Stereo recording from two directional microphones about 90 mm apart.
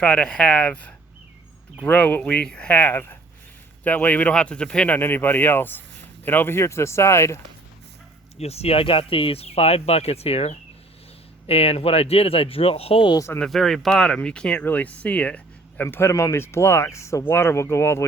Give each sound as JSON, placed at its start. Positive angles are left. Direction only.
{"t": 0.0, "sound": "speech", "side_deg": 10}
{"t": 8.6, "sound": "speech", "side_deg": 90}
{"t": 11.4, "sound": "speech", "side_deg": 90}
{"t": 13.1, "sound": "speech", "side_deg": 30}
{"t": 13.4, "sound": "speech", "side_deg": 5}